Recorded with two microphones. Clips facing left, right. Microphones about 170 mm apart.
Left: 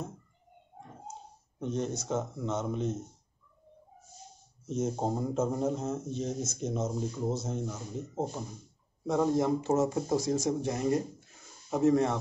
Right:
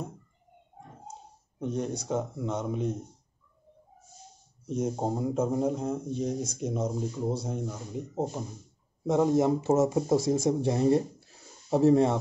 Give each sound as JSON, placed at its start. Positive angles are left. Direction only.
{"t": 1.6, "sound": "a man's voice", "side_deg": -10}
{"t": 4.6, "sound": "a man's voice", "side_deg": -10}